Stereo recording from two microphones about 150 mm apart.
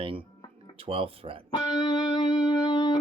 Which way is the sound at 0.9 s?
40° right (ahead or behind).